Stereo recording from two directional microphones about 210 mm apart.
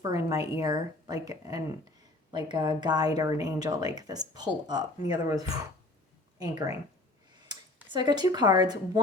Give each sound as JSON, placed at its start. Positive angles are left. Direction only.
{"t": 0.0, "sound": "speech", "side_deg": -15}